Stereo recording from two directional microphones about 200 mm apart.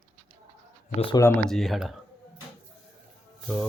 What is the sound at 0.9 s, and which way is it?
Speech, 25° left (ahead or behind).